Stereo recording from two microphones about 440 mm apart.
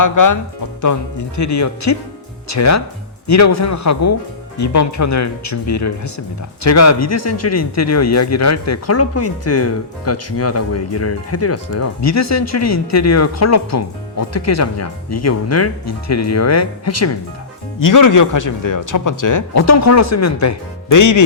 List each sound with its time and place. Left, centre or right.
0.0 s speech: left
1.4 s speech: left